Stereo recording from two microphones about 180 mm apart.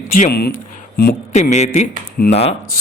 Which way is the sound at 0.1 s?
55° left (ahead or behind).